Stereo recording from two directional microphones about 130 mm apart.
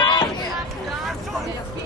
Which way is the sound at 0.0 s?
30° left (ahead or behind).